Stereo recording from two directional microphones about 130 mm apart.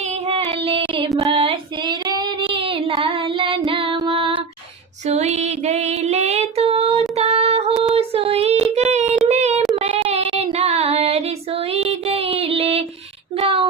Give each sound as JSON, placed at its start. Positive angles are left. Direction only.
{"t": 0.0, "sound": "child singing", "side_deg": -55}
{"t": 1.2, "sound": "female singing", "side_deg": -45}
{"t": 2.4, "sound": "child singing", "side_deg": -45}
{"t": 3.7, "sound": "music", "side_deg": -45}
{"t": 3.9, "sound": "female singing", "side_deg": -40}
{"t": 5.0, "sound": "female singing", "side_deg": -60}
{"t": 7.9, "sound": "child singing", "side_deg": -50}
{"t": 13.3, "sound": "a sound", "side_deg": -45}